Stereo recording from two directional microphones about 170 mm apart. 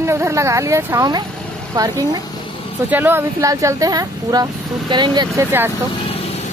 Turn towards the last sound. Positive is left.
turn(degrees=35)  # may be behind; listen again after turning